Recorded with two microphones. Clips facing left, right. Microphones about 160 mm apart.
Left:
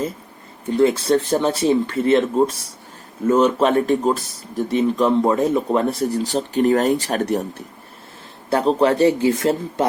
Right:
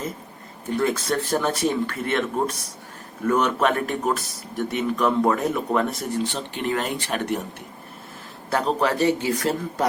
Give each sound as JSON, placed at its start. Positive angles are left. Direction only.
{"t": 0.8, "sound": "speech", "side_deg": 30}
{"t": 8.4, "sound": "speech", "side_deg": 30}